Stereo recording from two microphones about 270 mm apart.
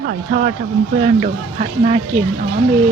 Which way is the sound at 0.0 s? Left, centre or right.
Right.